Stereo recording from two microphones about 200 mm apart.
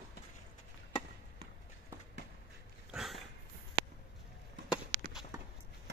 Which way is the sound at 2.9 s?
Centre (ahead or behind).